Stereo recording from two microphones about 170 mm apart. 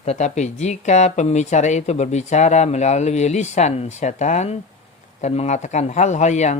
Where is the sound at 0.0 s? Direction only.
40° left (ahead or behind).